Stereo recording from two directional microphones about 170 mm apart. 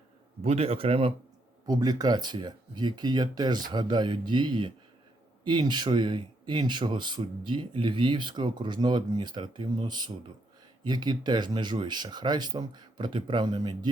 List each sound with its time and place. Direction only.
0.4 s a man's voice: 35° right (ahead or behind)
1.6 s speech: 25° right (ahead or behind)